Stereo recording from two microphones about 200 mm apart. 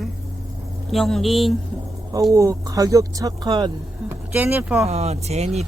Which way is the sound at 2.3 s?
15° right (ahead or behind).